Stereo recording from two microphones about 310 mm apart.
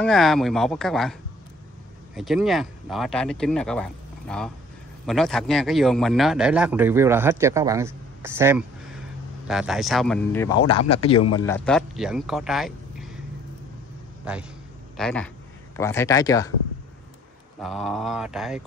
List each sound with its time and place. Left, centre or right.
0.0 s a man's voice: centre
2.1 s a man's voice: centre
10.7 s speech: centre
11.3 s speech: centre
14.3 s a man's voice: centre
17.6 s a man's voice: centre